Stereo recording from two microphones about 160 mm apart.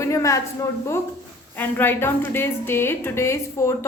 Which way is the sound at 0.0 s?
20° left (ahead or behind).